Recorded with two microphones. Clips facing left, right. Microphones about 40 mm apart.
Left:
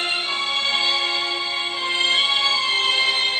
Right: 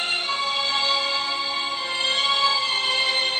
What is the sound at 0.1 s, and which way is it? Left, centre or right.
Music, left.